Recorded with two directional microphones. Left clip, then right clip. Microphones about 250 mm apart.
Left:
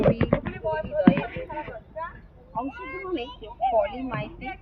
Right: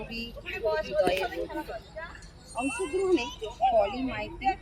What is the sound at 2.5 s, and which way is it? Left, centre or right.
A woman's voice, centre.